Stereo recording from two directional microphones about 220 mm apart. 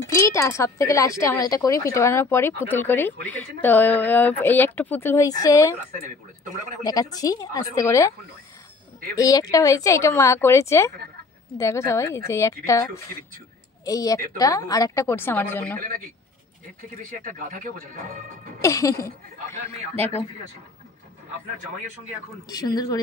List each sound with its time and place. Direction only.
0.0 s speech: 15° left (ahead or behind)
6.8 s speech: 15° left (ahead or behind)
9.1 s speech: 15° left (ahead or behind)
17.2 s speech: 40° right (ahead or behind)
18.6 s speech: 15° left (ahead or behind)
22.5 s speech: 15° left (ahead or behind)